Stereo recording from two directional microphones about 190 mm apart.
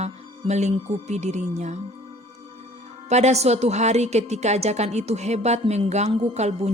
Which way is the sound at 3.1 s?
35° right (ahead or behind).